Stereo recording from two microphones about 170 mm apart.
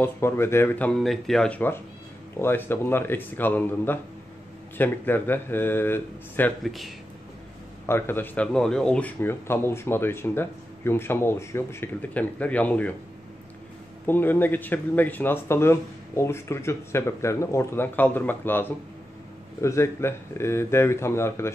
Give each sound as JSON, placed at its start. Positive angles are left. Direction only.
{"t": 0.0, "sound": "speech", "side_deg": 15}
{"t": 6.6, "sound": "a man's voice", "side_deg": 0}
{"t": 7.8, "sound": "speech", "side_deg": 15}
{"t": 14.0, "sound": "speech", "side_deg": 10}